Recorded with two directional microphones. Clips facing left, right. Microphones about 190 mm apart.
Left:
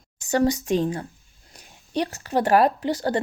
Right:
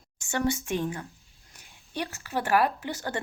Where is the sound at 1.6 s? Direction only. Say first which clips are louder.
Left 8 dB; 35° left (ahead or behind).